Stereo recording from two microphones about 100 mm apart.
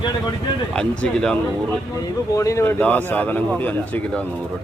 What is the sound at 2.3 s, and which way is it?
Speech, 30° left (ahead or behind).